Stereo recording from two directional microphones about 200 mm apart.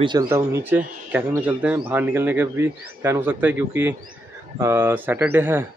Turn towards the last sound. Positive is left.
turn(degrees=-10)  # may be behind; listen again after turning